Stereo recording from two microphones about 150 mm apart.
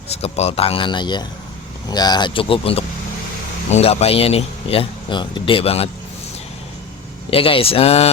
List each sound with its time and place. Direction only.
0.1 s speech: 45° left (ahead or behind)
7.3 s speech: 40° left (ahead or behind)